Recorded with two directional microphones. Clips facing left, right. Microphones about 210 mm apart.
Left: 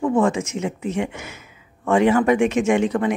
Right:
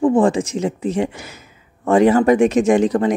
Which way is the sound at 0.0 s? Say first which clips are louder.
Right 4 dB; 30° right (ahead or behind).